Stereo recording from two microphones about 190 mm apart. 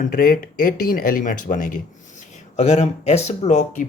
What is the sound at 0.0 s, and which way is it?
Speech, 45° left (ahead or behind).